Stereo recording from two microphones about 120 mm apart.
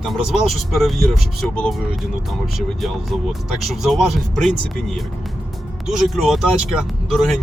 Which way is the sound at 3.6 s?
Centre (ahead or behind).